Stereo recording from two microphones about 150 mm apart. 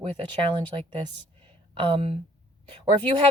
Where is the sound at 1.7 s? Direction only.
35° right (ahead or behind).